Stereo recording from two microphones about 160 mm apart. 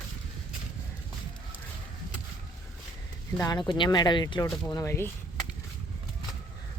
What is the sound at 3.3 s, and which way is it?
Speech, 25° left (ahead or behind).